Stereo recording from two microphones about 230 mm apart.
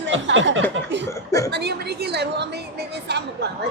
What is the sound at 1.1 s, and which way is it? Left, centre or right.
Speech, centre.